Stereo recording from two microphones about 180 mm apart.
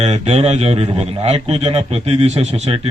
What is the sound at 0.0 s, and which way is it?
A man's voice, 35° right (ahead or behind).